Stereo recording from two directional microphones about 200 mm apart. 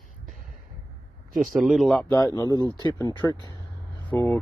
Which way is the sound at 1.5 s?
Centre (ahead or behind).